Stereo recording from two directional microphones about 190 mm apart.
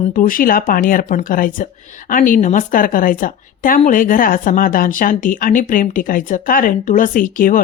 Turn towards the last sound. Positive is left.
turn(degrees=45)  # may be behind; listen again after turning